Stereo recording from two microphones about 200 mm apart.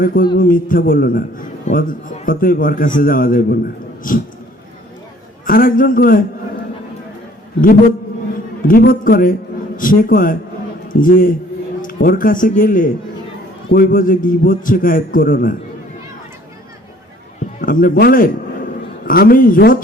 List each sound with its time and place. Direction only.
0.0 s a man's voice: 45° left (ahead or behind)
5.5 s a man's voice: 45° left (ahead or behind)
7.6 s a man's voice: 45° left (ahead or behind)
17.6 s a man's voice: 45° left (ahead or behind)